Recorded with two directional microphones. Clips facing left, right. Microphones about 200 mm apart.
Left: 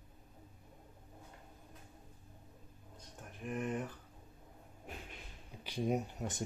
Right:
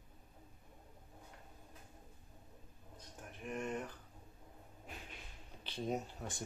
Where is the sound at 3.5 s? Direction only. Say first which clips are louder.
Left 3 dB; centre (ahead or behind).